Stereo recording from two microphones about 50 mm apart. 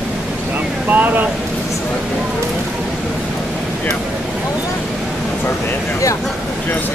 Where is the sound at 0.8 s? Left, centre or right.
Right.